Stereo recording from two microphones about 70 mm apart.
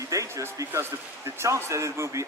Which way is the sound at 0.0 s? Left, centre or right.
Right.